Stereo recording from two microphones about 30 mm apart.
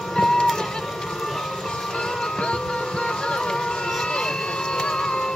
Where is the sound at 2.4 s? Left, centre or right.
Left.